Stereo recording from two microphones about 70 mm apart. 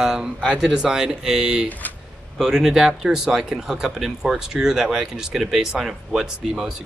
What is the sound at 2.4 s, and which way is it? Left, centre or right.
Speech, centre.